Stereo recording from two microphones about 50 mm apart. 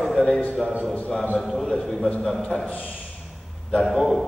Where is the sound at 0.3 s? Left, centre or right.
Left.